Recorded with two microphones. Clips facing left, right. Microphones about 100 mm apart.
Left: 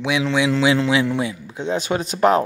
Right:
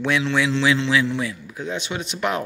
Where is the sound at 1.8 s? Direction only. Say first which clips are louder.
Left 11 dB; 40° left (ahead or behind).